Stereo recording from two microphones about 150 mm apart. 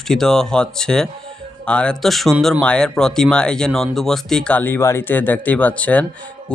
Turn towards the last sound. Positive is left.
turn(degrees=10)  # may be behind; listen again after turning